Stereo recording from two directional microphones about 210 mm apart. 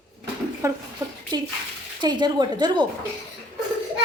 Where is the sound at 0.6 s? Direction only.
15° right (ahead or behind).